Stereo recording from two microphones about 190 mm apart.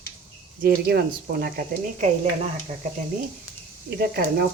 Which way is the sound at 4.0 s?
55° right (ahead or behind).